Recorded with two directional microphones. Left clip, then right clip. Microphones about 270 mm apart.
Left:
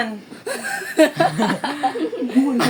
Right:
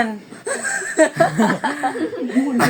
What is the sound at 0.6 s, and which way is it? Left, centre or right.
Chuckle, centre.